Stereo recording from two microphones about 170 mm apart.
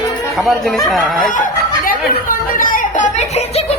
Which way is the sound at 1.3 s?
50° left (ahead or behind).